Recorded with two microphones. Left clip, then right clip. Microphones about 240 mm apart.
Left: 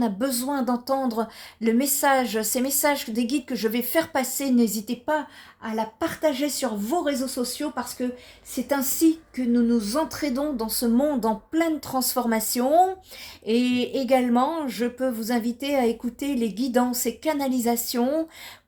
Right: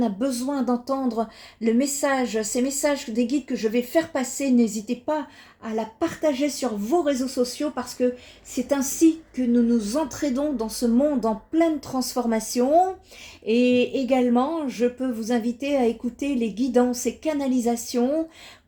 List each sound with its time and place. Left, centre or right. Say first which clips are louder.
0.0 s speech: right 1 dB; left